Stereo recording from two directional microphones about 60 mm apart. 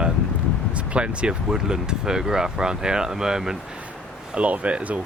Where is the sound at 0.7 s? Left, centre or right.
Centre.